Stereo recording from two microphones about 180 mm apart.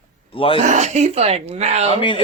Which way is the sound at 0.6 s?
40° right (ahead or behind).